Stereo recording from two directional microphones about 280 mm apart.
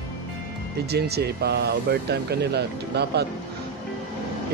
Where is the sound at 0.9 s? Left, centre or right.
Right.